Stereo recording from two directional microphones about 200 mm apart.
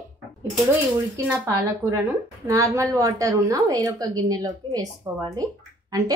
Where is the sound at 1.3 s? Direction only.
15° right (ahead or behind).